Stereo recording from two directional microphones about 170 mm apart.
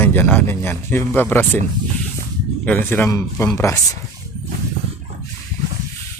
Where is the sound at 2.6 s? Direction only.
10° left (ahead or behind).